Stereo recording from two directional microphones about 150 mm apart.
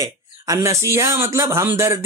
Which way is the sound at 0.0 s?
20° right (ahead or behind).